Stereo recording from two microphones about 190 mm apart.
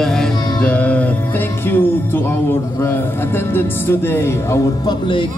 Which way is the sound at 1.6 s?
10° left (ahead or behind).